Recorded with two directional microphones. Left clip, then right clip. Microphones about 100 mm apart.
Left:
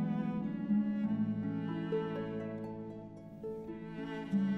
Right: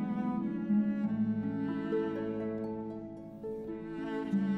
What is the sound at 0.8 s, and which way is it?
Cello, 40° right (ahead or behind).